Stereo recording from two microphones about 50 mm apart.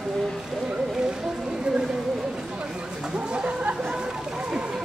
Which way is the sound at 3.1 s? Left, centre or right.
Right.